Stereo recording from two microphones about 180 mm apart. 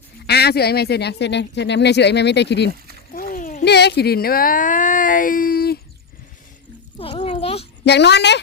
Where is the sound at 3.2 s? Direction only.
50° left (ahead or behind).